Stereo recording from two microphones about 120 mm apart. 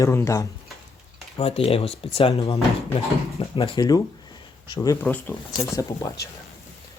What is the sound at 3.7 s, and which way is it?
Speech, 30° left (ahead or behind).